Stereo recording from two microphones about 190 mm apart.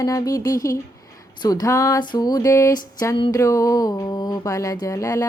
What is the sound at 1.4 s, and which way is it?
Music, 20° left (ahead or behind).